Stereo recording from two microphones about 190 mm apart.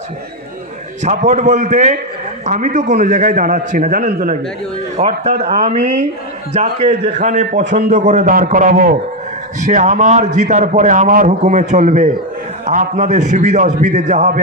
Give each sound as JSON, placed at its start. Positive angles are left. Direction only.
{"t": 1.0, "sound": "a man's voice", "side_deg": -40}